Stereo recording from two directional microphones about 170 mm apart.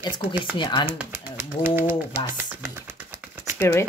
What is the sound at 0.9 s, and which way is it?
Speech, 10° right (ahead or behind).